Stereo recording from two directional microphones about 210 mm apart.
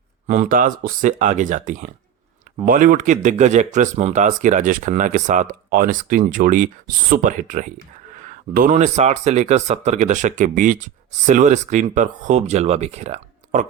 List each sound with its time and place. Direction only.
0.3 s speech: 40° right (ahead or behind)